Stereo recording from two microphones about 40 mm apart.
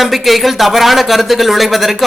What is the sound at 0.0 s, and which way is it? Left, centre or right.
A man's voice, centre.